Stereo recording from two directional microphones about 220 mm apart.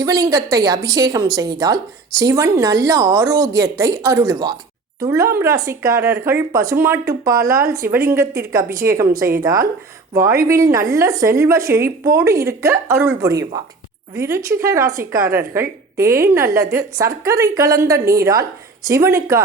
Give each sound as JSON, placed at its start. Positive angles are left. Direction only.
{"t": 0.0, "sound": "a woman's voice", "side_deg": -15}